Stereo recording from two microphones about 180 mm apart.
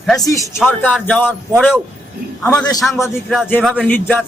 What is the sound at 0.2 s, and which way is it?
A man's voice, 20° left (ahead or behind).